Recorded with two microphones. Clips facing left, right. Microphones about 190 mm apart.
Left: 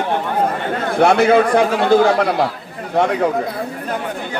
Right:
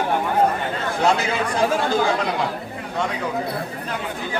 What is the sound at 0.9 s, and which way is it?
A man's voice, 60° left (ahead or behind).